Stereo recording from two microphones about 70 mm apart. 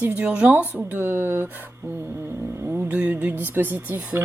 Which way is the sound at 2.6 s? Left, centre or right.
Right.